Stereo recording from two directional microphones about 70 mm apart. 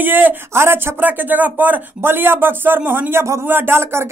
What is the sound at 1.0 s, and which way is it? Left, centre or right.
Speech, right.